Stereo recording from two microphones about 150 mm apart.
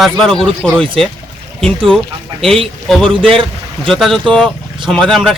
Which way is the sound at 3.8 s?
Centre (ahead or behind).